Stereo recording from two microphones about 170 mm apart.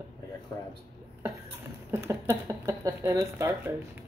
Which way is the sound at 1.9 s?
10° right (ahead or behind).